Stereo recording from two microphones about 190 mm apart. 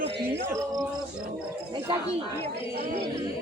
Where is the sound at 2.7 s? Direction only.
55° right (ahead or behind).